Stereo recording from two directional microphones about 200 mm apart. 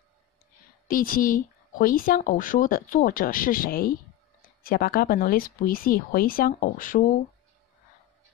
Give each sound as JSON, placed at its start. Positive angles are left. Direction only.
{"t": 0.8, "sound": "a woman's voice", "side_deg": 45}